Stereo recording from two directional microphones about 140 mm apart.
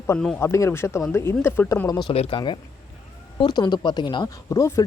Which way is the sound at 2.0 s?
40° left (ahead or behind).